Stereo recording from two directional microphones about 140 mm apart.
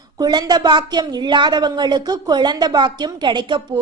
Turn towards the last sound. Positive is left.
turn(degrees=-35)  # may be behind; listen again after turning